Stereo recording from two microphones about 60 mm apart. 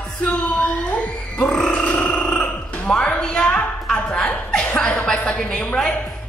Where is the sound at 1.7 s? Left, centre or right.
Left.